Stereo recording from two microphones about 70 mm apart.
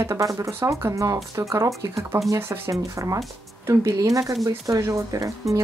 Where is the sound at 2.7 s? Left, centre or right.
Right.